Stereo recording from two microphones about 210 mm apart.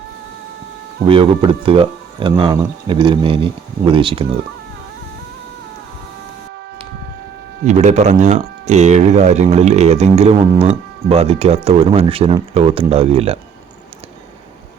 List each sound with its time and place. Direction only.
1.0 s speech: 25° right (ahead or behind)
7.6 s speech: 35° right (ahead or behind)